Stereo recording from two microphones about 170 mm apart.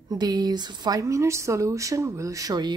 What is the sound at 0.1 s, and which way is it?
Speech, 25° right (ahead or behind).